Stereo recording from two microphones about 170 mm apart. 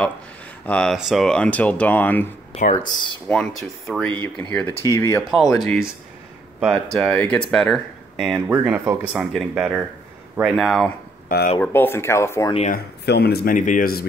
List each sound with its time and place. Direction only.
0.7 s speech: 5° left (ahead or behind)
2.5 s speech: 35° left (ahead or behind)
3.3 s speech: 5° left (ahead or behind)
5.3 s speech: centre (ahead or behind)
8.5 s speech: 15° right (ahead or behind)
9.1 s speech: centre (ahead or behind)
11.2 s speech: 55° left (ahead or behind)
11.6 s speech: 10° left (ahead or behind)
12.7 s speech: 70° left (ahead or behind)